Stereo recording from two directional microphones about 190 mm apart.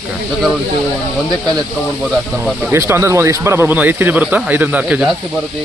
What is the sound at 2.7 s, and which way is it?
Speech, 15° right (ahead or behind).